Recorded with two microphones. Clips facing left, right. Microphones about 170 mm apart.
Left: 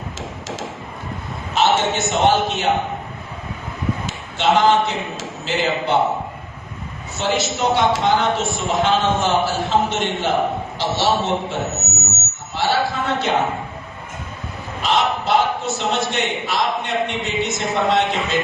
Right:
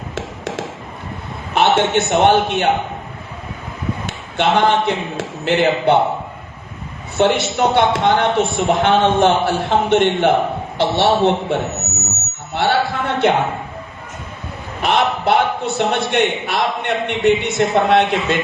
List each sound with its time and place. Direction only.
1.5 s speech: 60° right (ahead or behind)
4.0 s a man's voice: 60° right (ahead or behind)
7.2 s speech: 60° right (ahead or behind)
12.5 s a sound: 60° right (ahead or behind)
14.8 s a man's voice: 60° right (ahead or behind)